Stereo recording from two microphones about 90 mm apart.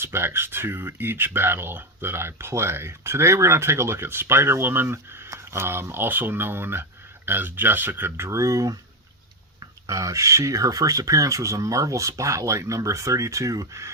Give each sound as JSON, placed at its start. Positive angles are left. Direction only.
{"t": 0.0, "sound": "speech", "side_deg": -25}
{"t": 9.8, "sound": "speech", "side_deg": -35}